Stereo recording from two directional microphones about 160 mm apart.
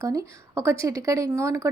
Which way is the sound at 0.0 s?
20° right (ahead or behind).